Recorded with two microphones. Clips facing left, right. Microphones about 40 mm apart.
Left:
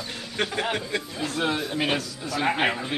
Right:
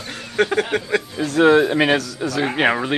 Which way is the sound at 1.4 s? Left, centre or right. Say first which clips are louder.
Right 13 dB; right.